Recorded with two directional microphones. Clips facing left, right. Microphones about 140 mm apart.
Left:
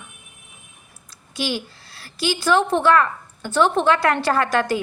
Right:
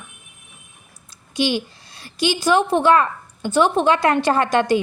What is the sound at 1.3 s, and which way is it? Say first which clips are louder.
A woman's voice: right 5 dB; 20° right (ahead or behind).